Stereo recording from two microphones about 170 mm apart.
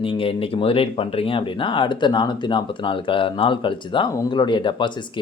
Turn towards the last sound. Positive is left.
turn(degrees=30)  # may be behind; listen again after turning